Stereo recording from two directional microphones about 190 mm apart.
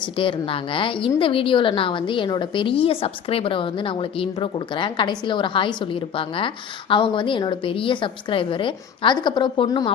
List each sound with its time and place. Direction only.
0.0 s a woman's voice: 25° left (ahead or behind)